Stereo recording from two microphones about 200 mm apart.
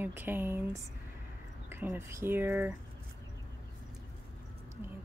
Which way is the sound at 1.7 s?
10° right (ahead or behind).